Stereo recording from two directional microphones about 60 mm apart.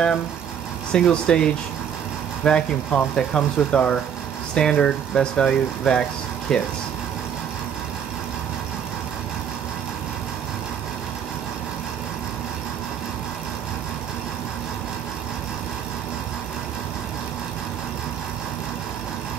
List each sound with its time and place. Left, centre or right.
0.9 s speech: centre